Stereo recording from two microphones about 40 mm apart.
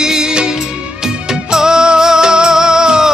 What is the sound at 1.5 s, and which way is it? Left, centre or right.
Music, centre.